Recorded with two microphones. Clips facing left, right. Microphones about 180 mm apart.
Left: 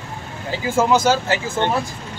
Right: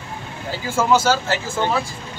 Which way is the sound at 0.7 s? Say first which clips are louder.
Left 1 dB; 15° left (ahead or behind).